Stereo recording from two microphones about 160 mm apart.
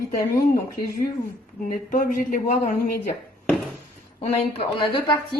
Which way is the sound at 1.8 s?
55° left (ahead or behind).